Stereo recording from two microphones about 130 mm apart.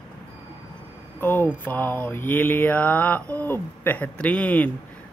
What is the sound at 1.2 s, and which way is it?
Mantra, 15° left (ahead or behind).